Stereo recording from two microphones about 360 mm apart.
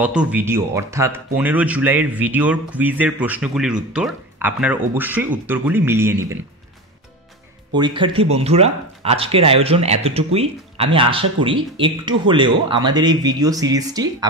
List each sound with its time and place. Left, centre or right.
0.0 s speech: centre
7.7 s speech: centre